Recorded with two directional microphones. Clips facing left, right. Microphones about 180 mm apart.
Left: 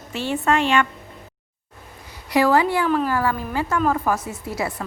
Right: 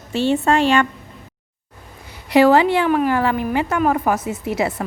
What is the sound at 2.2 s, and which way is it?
A woman's voice, 25° right (ahead or behind).